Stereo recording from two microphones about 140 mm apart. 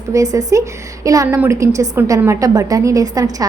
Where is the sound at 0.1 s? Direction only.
25° right (ahead or behind).